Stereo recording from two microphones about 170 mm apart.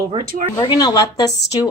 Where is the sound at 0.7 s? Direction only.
25° left (ahead or behind).